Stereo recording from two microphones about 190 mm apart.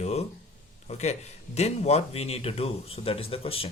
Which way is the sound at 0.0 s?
35° left (ahead or behind).